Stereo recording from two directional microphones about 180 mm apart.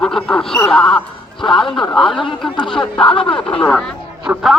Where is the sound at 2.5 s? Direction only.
25° left (ahead or behind).